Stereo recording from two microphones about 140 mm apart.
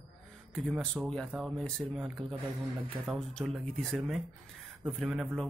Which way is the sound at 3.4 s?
5° left (ahead or behind).